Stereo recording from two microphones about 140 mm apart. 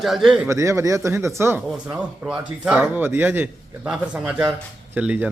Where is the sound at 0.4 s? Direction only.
20° right (ahead or behind).